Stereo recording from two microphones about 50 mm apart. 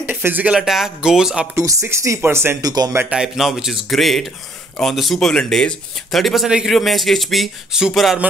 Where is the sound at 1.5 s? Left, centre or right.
Right.